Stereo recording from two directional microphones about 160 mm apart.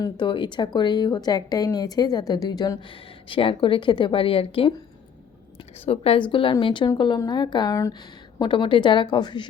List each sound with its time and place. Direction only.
0.0 s a woman's voice: 30° left (ahead or behind)
5.8 s a woman's voice: 35° left (ahead or behind)